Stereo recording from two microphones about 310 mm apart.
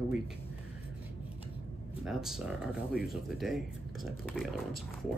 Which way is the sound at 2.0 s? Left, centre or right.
Centre.